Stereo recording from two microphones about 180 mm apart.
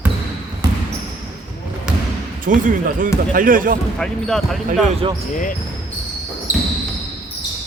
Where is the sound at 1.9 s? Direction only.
5° right (ahead or behind).